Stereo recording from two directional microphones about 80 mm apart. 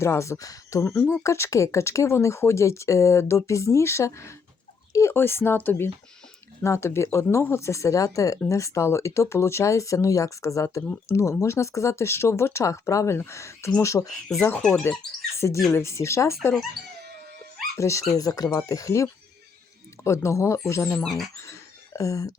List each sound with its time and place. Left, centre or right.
0.0 s speech: left
17.7 s speech: left
18.1 s speech: left
20.1 s speech: left
20.9 s speech: centre
21.4 s a sound: left